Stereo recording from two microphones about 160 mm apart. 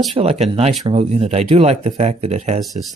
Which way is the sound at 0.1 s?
35° right (ahead or behind).